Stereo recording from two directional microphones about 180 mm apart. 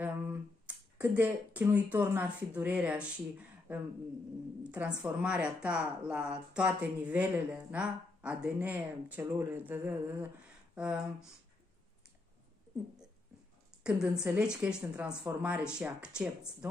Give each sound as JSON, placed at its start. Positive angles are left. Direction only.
{"t": 0.0, "sound": "a woman's voice", "side_deg": -10}
{"t": 10.7, "sound": "a sound", "side_deg": -5}
{"t": 13.8, "sound": "speech", "side_deg": -5}